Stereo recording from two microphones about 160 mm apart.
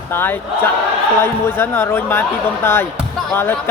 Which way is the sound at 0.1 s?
15° left (ahead or behind).